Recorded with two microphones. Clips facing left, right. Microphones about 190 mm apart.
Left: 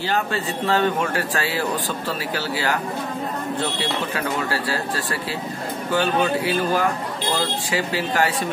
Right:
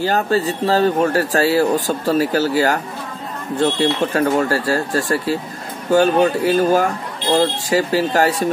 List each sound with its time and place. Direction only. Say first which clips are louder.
0.0 s a man's voice: right 6 dB; 40° right (ahead or behind)